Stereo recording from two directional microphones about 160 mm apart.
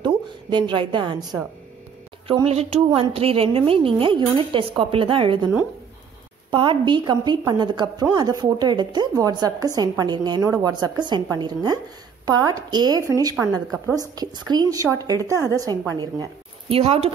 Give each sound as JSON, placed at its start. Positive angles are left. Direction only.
{"t": 0.0, "sound": "a woman's voice", "side_deg": -30}
{"t": 6.5, "sound": "a woman's voice", "side_deg": -30}
{"t": 16.6, "sound": "a woman's voice", "side_deg": -40}